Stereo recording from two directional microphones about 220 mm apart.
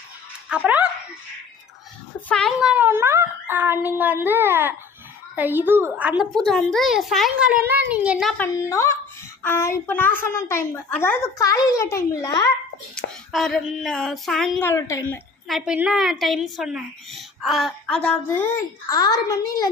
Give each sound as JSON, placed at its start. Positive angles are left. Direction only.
{"t": 0.5, "sound": "a woman's voice", "side_deg": -5}
{"t": 2.2, "sound": "a woman's voice", "side_deg": 0}
{"t": 7.5, "sound": "a child's voice", "side_deg": -45}
{"t": 7.9, "sound": "a woman's voice", "side_deg": -5}
{"t": 8.5, "sound": "a woman's voice", "side_deg": 15}
{"t": 12.9, "sound": "a woman's voice", "side_deg": 5}
{"t": 14.7, "sound": "a woman's voice", "side_deg": 15}
{"t": 15.4, "sound": "a woman's voice", "side_deg": 0}